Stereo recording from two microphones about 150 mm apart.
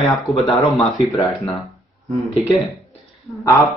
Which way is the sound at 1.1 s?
20° left (ahead or behind).